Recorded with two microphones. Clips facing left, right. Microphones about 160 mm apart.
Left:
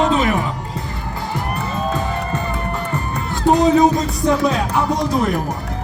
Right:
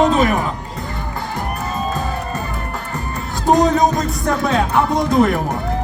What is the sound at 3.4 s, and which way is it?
Speech, 40° right (ahead or behind).